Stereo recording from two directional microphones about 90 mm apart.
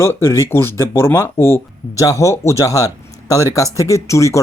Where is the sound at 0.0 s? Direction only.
30° left (ahead or behind).